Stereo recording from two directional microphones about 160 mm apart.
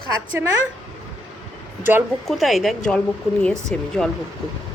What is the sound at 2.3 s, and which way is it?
Speech, centre (ahead or behind).